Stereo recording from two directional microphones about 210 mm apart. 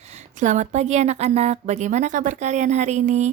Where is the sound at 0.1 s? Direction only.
35° right (ahead or behind).